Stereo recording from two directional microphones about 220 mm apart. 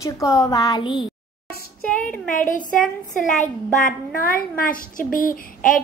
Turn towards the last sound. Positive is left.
turn(degrees=40)  # may be behind; listen again after turning